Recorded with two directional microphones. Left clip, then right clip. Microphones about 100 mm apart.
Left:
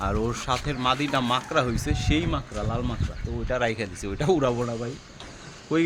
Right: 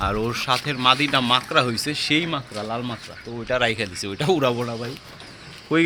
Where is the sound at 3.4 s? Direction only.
40° right (ahead or behind).